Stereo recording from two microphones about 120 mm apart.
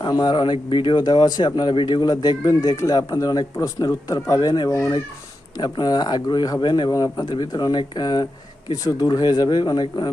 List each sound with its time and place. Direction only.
0.0 s speech: 35° left (ahead or behind)
4.7 s speech: 25° left (ahead or behind)
5.5 s speech: 35° left (ahead or behind)